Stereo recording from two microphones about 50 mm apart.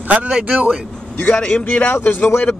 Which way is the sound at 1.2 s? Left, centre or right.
Left.